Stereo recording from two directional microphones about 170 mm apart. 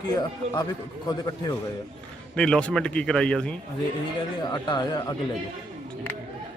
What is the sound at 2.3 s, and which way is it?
Speech, 5° left (ahead or behind).